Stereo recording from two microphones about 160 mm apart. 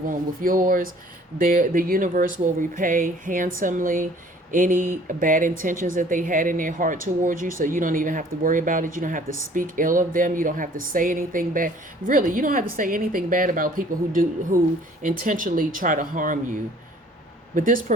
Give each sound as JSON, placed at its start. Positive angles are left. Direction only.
{"t": 0.1, "sound": "speech", "side_deg": -60}
{"t": 17.5, "sound": "speech", "side_deg": -55}